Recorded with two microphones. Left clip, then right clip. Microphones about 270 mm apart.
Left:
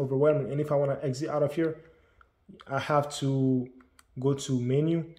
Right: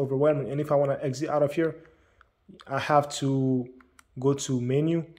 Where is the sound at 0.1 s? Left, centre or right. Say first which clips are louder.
Left 1 dB; centre.